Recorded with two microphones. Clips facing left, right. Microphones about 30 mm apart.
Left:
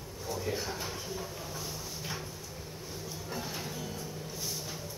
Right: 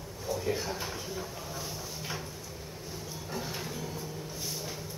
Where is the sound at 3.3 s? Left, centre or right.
Centre.